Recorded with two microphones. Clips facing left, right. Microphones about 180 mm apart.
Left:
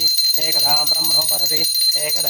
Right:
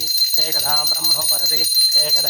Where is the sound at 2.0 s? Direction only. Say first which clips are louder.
Left 1 dB; 5° left (ahead or behind).